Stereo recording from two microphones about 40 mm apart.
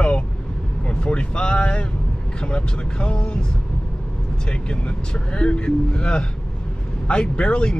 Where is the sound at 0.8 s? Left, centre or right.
Left.